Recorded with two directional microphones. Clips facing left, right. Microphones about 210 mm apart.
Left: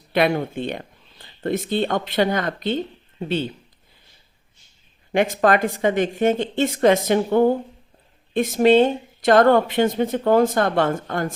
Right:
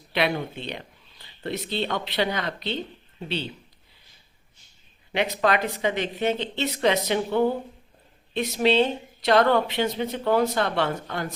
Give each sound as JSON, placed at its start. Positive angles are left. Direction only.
{"t": 0.1, "sound": "speech", "side_deg": 45}
{"t": 5.1, "sound": "speech", "side_deg": 50}